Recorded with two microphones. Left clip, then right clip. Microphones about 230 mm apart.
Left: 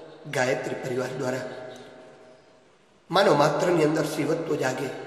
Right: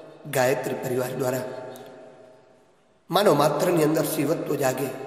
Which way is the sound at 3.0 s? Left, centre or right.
Right.